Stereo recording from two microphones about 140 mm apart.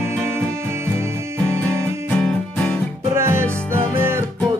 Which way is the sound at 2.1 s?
10° left (ahead or behind).